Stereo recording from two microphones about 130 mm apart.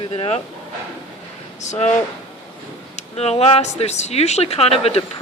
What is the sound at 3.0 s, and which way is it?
Speech, 55° left (ahead or behind).